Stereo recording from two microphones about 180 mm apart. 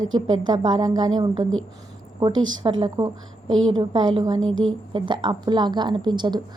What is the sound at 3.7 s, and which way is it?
A woman's voice, 25° right (ahead or behind).